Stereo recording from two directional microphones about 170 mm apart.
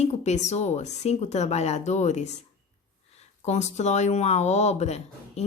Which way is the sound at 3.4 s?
45° left (ahead or behind).